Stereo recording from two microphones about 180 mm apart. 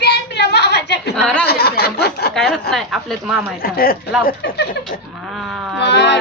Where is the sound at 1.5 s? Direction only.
60° left (ahead or behind).